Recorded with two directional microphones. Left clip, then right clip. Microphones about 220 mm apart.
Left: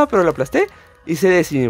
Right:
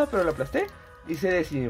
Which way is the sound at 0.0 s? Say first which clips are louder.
Left 9 dB; 50° left (ahead or behind).